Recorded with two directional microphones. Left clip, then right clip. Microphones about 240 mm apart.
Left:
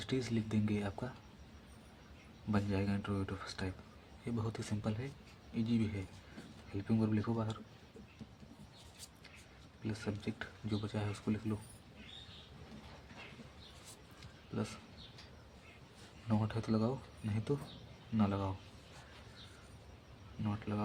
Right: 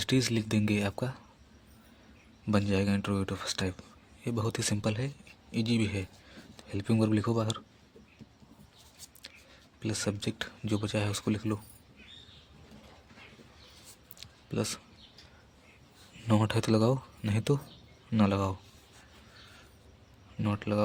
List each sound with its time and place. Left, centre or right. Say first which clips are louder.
0.0 s speech: right 9 dB; right
2.5 s speech: right 8 dB; right
9.8 s speech: right 9 dB; right
14.2 s a sound: right 9 dB; right
16.3 s speech: right 10 dB; right
20.4 s speech: right 11 dB; right